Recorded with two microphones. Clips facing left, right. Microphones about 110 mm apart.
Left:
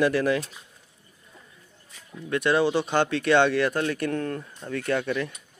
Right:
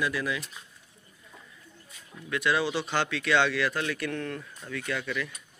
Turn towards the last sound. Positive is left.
turn(degrees=45)  # may be behind; listen again after turning